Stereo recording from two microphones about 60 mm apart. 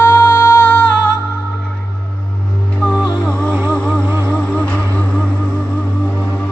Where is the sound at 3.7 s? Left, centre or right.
Centre.